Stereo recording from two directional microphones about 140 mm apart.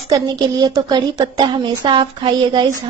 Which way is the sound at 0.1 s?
25° right (ahead or behind).